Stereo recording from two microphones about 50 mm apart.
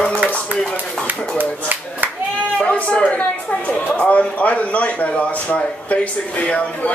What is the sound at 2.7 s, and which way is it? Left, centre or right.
A man's voice, left.